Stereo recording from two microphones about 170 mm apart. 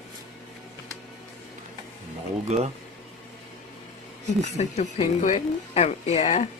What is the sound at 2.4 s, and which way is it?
Speech, 40° right (ahead or behind).